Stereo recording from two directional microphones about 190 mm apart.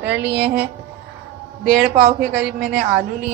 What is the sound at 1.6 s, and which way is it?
A woman's voice, 5° right (ahead or behind).